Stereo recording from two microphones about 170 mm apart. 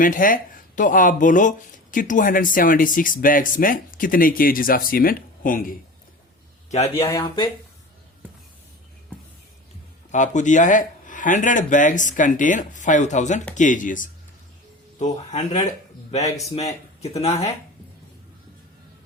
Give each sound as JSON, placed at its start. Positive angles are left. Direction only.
{"t": 0.0, "sound": "speech", "side_deg": 55}
{"t": 6.7, "sound": "speech", "side_deg": 40}
{"t": 7.0, "sound": "speech", "side_deg": 20}
{"t": 10.1, "sound": "speech", "side_deg": 45}
{"t": 17.0, "sound": "speech", "side_deg": 40}